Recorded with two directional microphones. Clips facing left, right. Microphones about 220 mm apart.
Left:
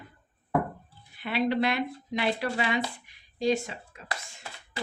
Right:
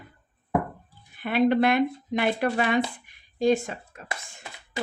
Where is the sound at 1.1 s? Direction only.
50° right (ahead or behind).